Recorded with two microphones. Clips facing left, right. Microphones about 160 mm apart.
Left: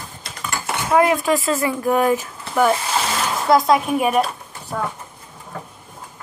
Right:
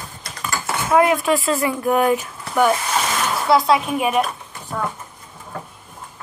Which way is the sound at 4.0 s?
35° left (ahead or behind).